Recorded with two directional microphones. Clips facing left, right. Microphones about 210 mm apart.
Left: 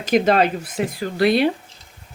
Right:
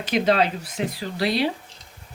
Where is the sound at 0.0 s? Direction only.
50° left (ahead or behind).